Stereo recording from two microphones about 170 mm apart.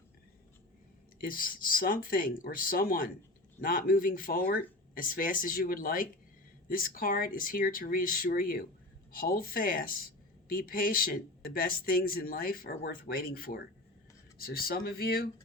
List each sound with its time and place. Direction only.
1.2 s speech: 55° left (ahead or behind)